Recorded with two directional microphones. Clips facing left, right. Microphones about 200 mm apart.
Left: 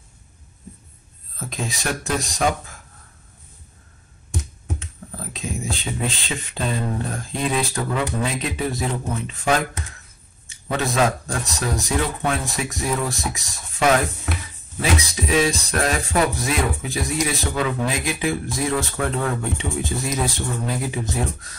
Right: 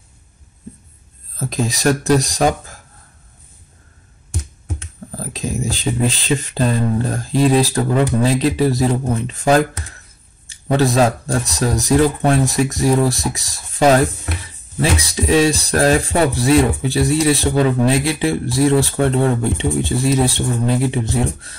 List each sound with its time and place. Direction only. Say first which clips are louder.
1.4 s speech: right 10 dB; 40° right (ahead or behind)
5.1 s speech: right 6 dB; 35° right (ahead or behind)